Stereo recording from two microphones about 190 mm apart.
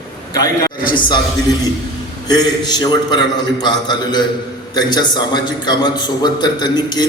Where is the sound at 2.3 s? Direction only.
20° left (ahead or behind).